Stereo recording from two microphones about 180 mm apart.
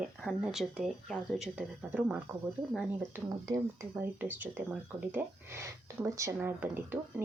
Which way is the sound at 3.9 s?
10° right (ahead or behind).